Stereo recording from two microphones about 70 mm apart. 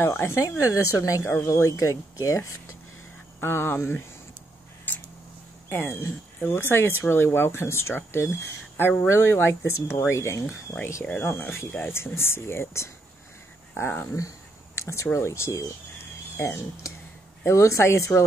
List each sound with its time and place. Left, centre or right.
0.0 s speech: left
0.4 s speech: left
3.3 s speech: left
4.9 s a sound: left
5.7 s speech: left
10.7 s speech: left
11.9 s speech: left